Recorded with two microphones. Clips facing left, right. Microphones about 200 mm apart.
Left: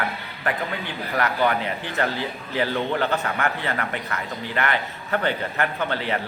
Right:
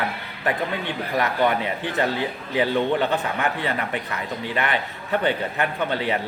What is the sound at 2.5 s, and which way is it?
Speech, 20° right (ahead or behind).